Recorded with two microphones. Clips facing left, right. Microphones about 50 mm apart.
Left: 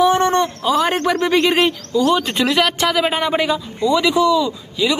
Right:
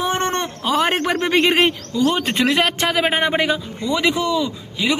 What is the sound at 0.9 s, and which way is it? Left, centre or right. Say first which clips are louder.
A man's voice: left 2 dB; right.